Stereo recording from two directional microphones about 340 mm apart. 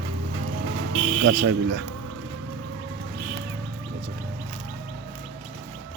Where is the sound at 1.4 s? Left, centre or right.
Right.